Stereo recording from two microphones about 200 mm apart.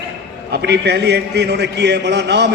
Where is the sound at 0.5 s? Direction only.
55° right (ahead or behind).